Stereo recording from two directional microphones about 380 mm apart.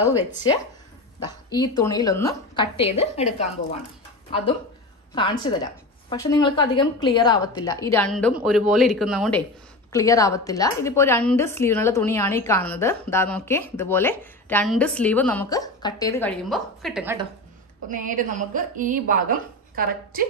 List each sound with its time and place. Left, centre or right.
0.0 s speech: centre
1.2 s a woman's voice: centre
5.1 s a woman's voice: centre
17.8 s a woman's voice: right